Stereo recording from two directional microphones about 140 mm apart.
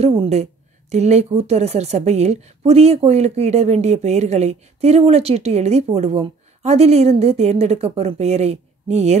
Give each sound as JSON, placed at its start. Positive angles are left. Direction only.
{"t": 0.0, "sound": "a woman's voice", "side_deg": -45}